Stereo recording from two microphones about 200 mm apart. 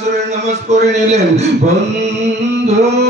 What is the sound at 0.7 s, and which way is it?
Speech, 35° right (ahead or behind).